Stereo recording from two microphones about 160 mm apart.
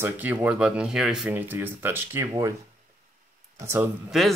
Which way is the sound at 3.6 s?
15° right (ahead or behind).